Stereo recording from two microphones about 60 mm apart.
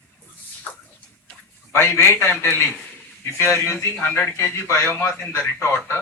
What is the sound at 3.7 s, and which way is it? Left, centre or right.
Speech, left.